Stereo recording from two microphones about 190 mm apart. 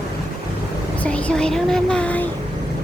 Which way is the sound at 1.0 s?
5° left (ahead or behind).